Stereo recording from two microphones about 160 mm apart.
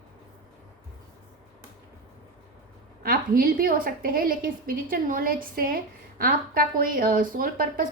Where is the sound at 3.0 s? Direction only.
60° right (ahead or behind).